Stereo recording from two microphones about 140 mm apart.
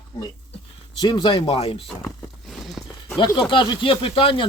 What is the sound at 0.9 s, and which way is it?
Speech, 35° left (ahead or behind).